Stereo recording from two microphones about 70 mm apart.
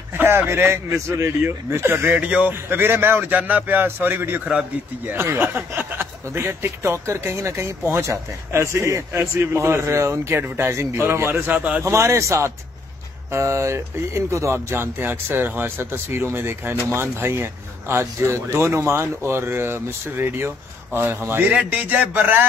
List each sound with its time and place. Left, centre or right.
0.1 s speech: right
1.4 s speech: right
2.1 s music: centre
2.5 s speech: right
11.5 s music: right
11.8 s speech: right
21.5 s music: right